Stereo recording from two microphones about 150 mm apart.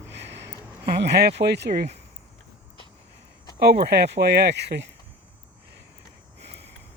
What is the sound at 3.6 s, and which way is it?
Speech, 90° right.